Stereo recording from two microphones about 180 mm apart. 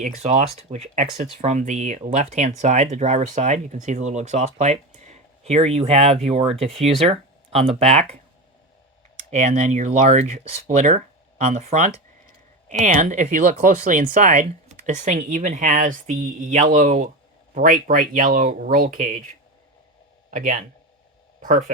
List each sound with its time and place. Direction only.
0.0 s speech: 35° right (ahead or behind)
6.7 s speech: centre (ahead or behind)
9.3 s speech: 40° right (ahead or behind)
20.3 s speech: 50° right (ahead or behind)